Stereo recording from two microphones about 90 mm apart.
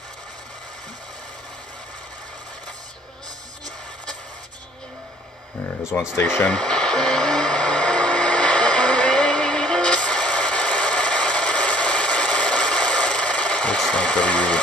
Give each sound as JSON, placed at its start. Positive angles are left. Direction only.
{"t": 6.1, "sound": "speech", "side_deg": 25}
{"t": 6.4, "sound": "radio", "side_deg": 10}